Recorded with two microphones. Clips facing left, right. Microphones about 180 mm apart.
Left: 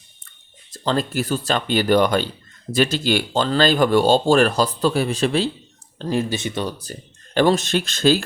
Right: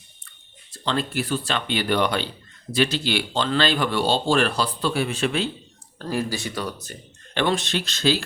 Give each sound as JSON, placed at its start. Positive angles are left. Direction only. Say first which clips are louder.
{"t": 0.7, "sound": "speech", "louder": "left 4 dB", "side_deg": 40}
{"t": 6.0, "sound": "speech", "louder": "left 4 dB", "side_deg": 25}